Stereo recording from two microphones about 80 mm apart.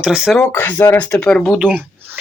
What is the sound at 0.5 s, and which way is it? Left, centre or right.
Speech, left.